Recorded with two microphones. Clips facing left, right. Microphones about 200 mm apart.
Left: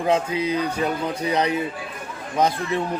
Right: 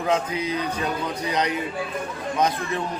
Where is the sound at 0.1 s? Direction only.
30° left (ahead or behind).